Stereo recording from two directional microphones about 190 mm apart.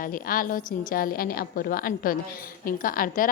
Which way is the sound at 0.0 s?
50° left (ahead or behind).